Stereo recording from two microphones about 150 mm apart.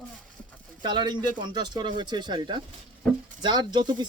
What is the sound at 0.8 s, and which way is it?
Speech, 30° right (ahead or behind).